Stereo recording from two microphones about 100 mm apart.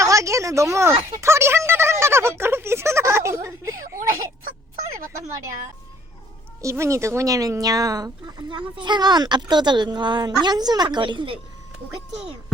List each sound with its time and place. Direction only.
0.0 s speech: 30° right (ahead or behind)
6.6 s speech: 30° right (ahead or behind); by 11.3 s 55° right (ahead or behind)